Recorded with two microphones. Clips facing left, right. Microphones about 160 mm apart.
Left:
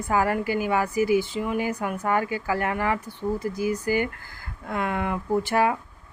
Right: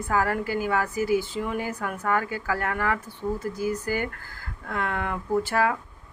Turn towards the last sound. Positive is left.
turn(degrees=20)  # may be behind; listen again after turning